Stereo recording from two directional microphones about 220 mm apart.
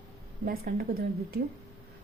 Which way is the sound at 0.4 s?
40° right (ahead or behind).